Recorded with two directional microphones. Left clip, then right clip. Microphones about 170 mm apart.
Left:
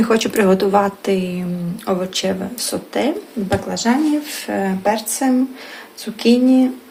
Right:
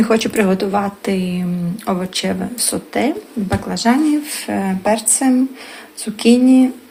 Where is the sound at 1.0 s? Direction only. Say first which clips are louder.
Left 1 dB; 15° right (ahead or behind).